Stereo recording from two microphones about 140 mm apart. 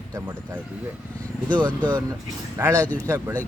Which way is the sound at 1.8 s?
30° right (ahead or behind).